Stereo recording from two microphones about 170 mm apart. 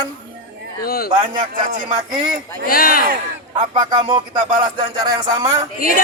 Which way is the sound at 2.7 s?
60° left (ahead or behind).